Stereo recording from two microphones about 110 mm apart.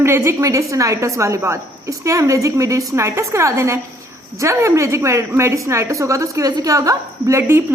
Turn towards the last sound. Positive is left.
turn(degrees=-20)  # may be behind; listen again after turning